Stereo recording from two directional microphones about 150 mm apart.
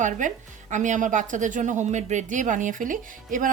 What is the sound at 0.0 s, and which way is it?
Speech, 55° right (ahead or behind).